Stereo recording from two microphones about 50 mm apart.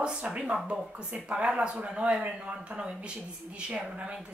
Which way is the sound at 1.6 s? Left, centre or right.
Right.